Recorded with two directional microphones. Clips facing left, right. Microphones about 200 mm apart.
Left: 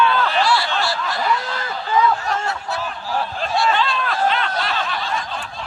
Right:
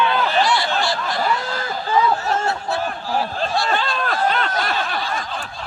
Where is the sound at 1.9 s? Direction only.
30° right (ahead or behind).